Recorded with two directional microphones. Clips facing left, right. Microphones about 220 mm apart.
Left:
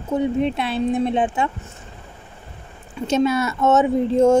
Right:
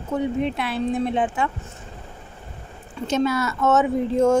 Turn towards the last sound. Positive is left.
turn(degrees=20)  # may be behind; listen again after turning